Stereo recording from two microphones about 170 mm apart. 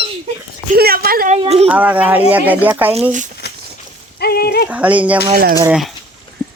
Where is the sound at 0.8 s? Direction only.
60° right (ahead or behind).